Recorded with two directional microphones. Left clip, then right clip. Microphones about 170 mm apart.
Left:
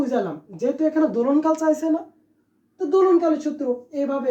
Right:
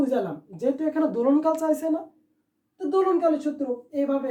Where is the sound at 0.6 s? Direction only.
35° right (ahead or behind).